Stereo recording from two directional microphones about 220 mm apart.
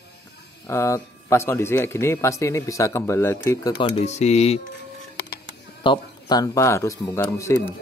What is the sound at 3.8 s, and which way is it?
Speech, 30° left (ahead or behind).